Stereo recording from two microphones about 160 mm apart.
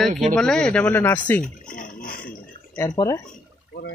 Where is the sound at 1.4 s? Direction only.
60° left (ahead or behind).